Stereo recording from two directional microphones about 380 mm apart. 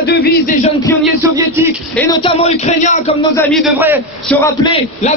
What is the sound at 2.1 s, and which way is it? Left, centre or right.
Speech, centre.